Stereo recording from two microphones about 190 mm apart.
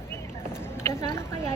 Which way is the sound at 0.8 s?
15° left (ahead or behind).